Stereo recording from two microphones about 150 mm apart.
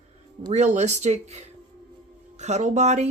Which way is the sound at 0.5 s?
50° right (ahead or behind).